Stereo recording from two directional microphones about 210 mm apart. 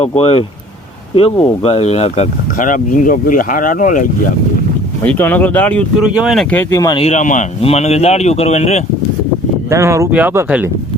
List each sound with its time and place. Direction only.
0.0 s speech: 30° left (ahead or behind)
5.0 s speech: 10° left (ahead or behind)
7.0 s speech: 35° left (ahead or behind)
9.6 s speech: 15° right (ahead or behind)